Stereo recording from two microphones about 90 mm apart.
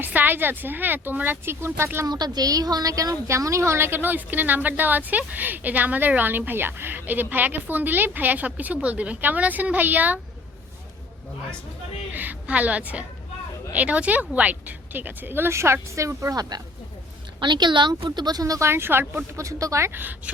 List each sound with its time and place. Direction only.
0.0 s a woman's voice: 20° right (ahead or behind)
2.0 s a woman's voice: 50° right (ahead or behind); by 10.2 s 20° right (ahead or behind)
12.1 s a woman's voice: 20° right (ahead or behind); by 16.6 s 45° right (ahead or behind)
17.4 s speech: 60° right (ahead or behind); by 18.7 s 40° right (ahead or behind)
18.7 s a woman's voice: 25° right (ahead or behind)